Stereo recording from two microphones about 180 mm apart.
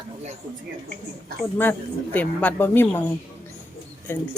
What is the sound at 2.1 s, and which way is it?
Speech, 10° left (ahead or behind).